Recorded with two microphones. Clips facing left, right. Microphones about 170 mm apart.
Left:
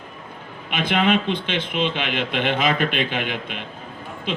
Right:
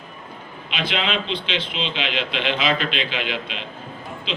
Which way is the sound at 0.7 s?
50° left (ahead or behind).